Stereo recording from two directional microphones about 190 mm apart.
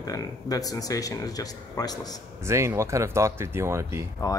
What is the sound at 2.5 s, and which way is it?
Speech, 15° right (ahead or behind).